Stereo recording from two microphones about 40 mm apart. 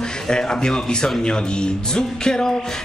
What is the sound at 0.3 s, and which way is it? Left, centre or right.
Speech, left.